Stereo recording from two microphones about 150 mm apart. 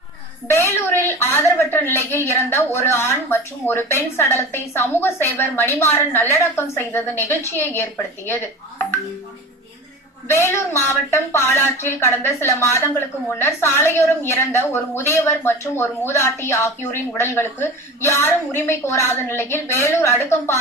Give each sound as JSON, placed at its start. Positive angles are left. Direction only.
{"t": 0.4, "sound": "a woman's voice", "side_deg": 15}
{"t": 10.2, "sound": "a woman's voice", "side_deg": 15}